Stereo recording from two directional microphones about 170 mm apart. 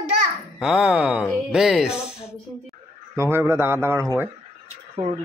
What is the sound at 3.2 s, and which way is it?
Speech, 15° right (ahead or behind).